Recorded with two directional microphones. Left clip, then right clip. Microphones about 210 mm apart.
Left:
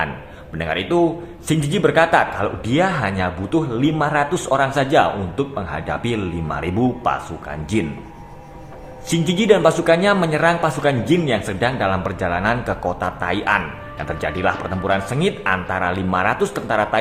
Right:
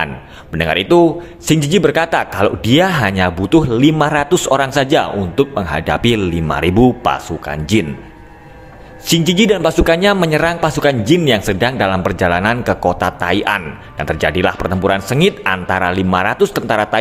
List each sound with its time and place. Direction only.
0.5 s a man's voice: 45° right (ahead or behind)
9.0 s a man's voice: 40° right (ahead or behind)